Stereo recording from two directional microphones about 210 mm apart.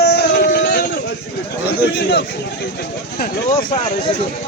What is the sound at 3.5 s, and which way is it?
Speech, 20° left (ahead or behind).